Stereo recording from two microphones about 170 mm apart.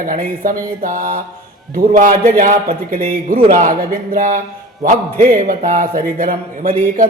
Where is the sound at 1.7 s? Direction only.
55° right (ahead or behind).